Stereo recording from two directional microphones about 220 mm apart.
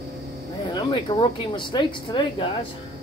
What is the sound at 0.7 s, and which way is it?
Speech, 20° left (ahead or behind).